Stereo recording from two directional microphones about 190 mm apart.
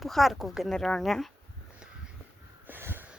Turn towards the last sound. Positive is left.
turn(degrees=-10)  # may be behind; listen again after turning